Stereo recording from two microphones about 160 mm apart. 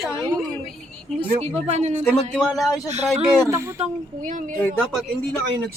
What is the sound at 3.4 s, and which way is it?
Speech, 15° right (ahead or behind).